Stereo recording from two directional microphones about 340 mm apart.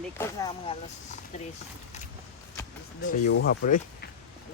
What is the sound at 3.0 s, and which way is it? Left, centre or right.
Speech, left.